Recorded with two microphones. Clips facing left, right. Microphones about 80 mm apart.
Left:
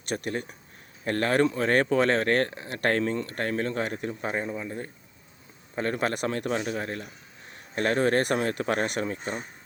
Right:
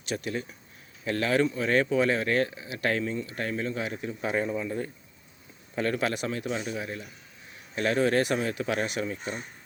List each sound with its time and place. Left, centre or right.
0.0 s speech: left
4.4 s speech: left